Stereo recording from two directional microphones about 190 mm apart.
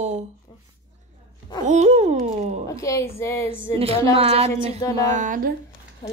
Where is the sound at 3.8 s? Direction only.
30° right (ahead or behind).